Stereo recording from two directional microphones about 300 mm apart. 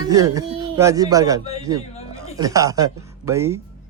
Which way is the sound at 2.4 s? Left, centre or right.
Centre.